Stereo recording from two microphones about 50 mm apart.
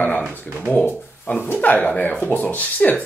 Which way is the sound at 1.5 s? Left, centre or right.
Left.